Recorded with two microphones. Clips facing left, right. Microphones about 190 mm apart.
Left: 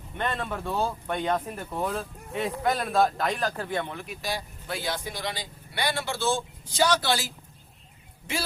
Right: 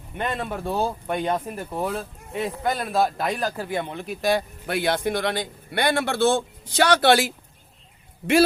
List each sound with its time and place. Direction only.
0.2 s speech: 10° right (ahead or behind)
4.1 s speech: 55° right (ahead or behind)